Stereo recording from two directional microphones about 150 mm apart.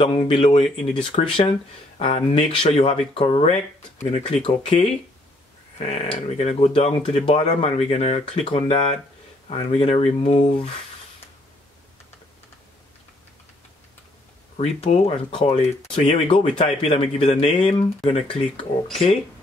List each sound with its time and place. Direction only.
0.0 s speech: 35° left (ahead or behind)
14.6 s speech: 40° left (ahead or behind)